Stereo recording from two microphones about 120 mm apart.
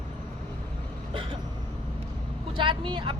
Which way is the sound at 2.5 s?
45° right (ahead or behind).